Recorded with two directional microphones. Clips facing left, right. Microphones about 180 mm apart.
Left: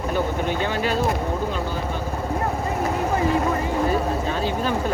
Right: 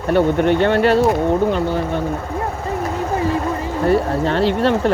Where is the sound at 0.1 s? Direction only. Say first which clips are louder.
Right 11 dB; 65° right (ahead or behind).